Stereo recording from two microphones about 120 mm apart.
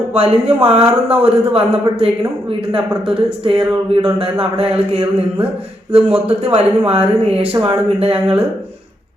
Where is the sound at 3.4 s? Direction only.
45° right (ahead or behind).